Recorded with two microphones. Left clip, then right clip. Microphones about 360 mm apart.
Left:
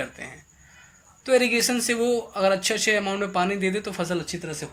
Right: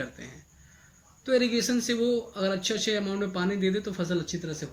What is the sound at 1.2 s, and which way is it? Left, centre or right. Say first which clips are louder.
Speech: left 5 dB; centre.